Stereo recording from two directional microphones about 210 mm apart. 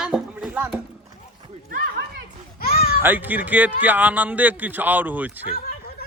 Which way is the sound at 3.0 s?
10° right (ahead or behind).